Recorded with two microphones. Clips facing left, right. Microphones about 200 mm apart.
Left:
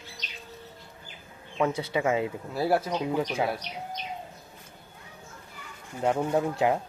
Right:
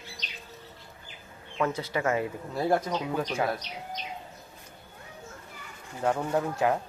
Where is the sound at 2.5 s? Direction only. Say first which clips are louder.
Even; 5° left (ahead or behind).